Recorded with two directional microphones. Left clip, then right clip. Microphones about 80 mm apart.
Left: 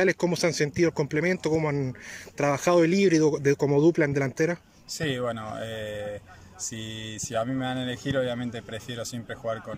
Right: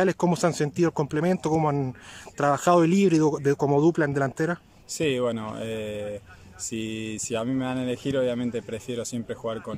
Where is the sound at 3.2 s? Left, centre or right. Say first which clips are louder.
Even; right.